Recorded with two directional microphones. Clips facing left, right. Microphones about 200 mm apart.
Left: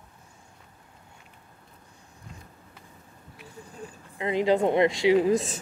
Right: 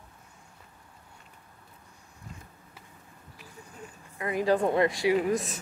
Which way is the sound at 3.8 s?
30° left (ahead or behind).